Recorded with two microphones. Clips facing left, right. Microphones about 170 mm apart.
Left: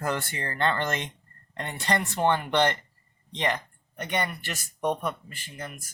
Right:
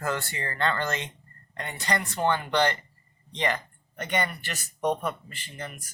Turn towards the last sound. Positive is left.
turn(degrees=10)  # may be behind; listen again after turning